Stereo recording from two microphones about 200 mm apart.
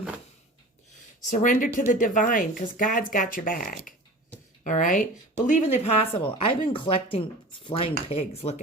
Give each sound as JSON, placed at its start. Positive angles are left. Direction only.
{"t": 1.4, "sound": "speech", "side_deg": 40}